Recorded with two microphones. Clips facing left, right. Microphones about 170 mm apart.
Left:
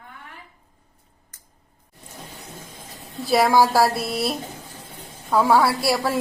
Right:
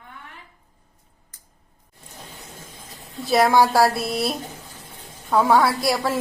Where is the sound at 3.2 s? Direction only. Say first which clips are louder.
Even; centre (ahead or behind).